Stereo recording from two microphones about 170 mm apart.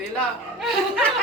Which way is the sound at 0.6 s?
Centre (ahead or behind).